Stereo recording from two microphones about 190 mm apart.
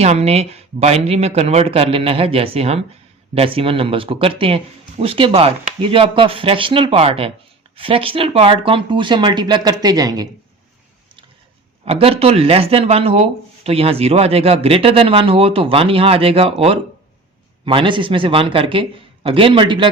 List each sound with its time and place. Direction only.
0.0 s a man's voice: 35° right (ahead or behind)
11.9 s a man's voice: 30° right (ahead or behind)